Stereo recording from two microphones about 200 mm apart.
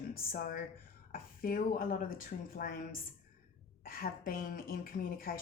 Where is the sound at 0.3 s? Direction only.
45° left (ahead or behind).